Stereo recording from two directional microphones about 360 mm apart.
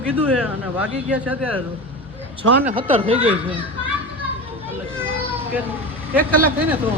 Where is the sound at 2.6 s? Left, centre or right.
Centre.